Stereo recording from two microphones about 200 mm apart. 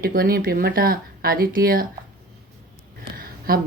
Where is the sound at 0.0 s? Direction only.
50° right (ahead or behind).